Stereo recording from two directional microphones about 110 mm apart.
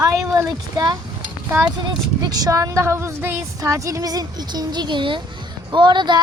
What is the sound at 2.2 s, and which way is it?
Speech, 35° right (ahead or behind).